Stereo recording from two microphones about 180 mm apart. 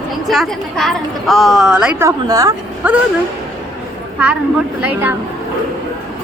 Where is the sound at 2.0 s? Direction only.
20° right (ahead or behind).